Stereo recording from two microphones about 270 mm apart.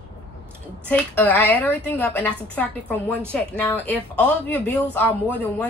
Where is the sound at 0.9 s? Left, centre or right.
Centre.